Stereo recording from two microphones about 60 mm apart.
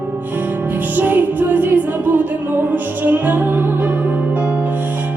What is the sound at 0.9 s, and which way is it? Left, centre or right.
Music, right.